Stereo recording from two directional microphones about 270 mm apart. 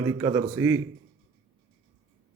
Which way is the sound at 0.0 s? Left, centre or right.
Centre.